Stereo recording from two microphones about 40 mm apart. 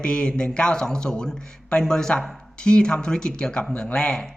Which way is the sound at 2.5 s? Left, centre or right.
Left.